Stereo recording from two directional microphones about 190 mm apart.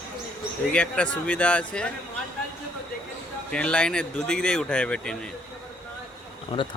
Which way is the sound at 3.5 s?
5° left (ahead or behind).